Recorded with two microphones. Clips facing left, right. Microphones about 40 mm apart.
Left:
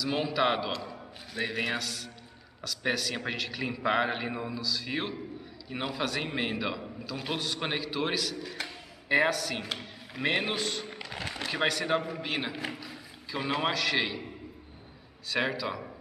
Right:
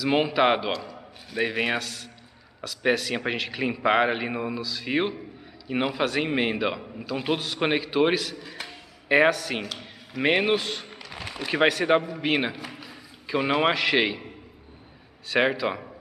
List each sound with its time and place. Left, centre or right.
0.3 s a man's voice: centre
11.1 s a sound: centre
11.5 s a man's voice: right
12.8 s a sound: right
13.6 s a man's voice: right
15.2 s a man's voice: right